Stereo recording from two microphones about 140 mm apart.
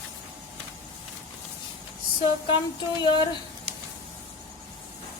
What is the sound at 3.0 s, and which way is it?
Speech, 35° left (ahead or behind).